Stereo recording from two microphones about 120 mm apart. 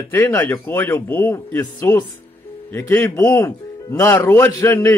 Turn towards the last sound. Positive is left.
turn(degrees=25)  # may be behind; listen again after turning